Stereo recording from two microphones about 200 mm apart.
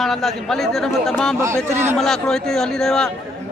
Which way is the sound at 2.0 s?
Centre (ahead or behind).